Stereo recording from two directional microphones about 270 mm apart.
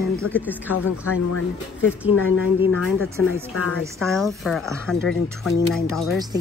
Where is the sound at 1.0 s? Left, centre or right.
Left.